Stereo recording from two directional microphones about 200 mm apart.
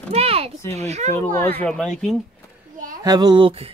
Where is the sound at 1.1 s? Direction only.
10° left (ahead or behind).